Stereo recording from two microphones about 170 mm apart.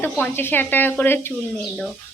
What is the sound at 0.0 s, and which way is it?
A woman's voice, 10° left (ahead or behind).